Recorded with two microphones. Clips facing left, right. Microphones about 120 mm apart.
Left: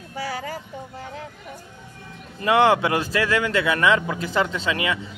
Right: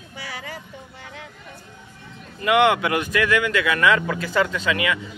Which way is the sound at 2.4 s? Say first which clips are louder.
Even; 30° left (ahead or behind).